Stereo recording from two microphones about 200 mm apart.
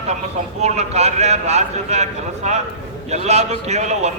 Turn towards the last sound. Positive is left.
turn(degrees=-35)  # may be behind; listen again after turning